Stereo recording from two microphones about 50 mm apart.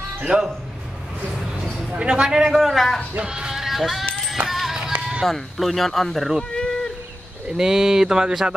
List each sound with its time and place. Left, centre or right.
0.2 s speech: centre
2.0 s speech: centre
3.2 s speech: centre
4.5 s music: centre
5.2 s speech: centre
6.5 s a sound: centre
7.4 s speech: centre